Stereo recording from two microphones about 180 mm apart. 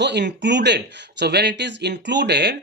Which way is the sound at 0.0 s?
70° right (ahead or behind).